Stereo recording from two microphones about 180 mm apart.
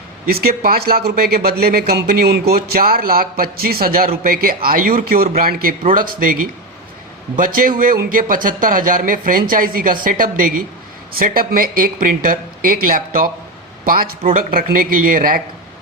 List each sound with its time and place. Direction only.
0.3 s speech: 55° right (ahead or behind)
7.3 s speech: 50° right (ahead or behind)